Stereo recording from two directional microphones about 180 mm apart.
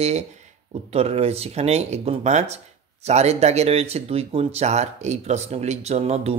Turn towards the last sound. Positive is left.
turn(degrees=-35)  # may be behind; listen again after turning